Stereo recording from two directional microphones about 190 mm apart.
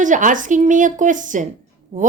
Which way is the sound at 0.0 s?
40° right (ahead or behind).